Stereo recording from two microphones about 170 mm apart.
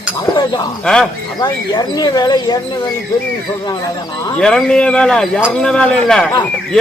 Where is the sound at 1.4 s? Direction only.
25° left (ahead or behind).